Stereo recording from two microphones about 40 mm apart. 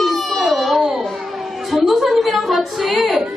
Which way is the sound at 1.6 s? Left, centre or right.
Centre.